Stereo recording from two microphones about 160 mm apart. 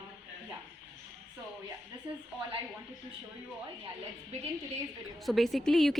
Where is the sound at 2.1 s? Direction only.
30° right (ahead or behind).